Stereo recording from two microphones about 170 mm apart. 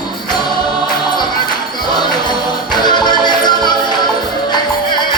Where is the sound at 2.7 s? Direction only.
25° left (ahead or behind).